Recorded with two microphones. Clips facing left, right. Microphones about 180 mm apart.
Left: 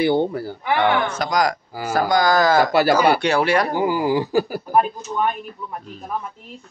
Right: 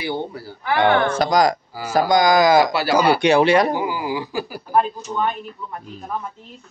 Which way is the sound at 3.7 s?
45° left (ahead or behind).